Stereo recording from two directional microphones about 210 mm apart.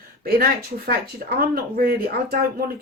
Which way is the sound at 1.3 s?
45° right (ahead or behind).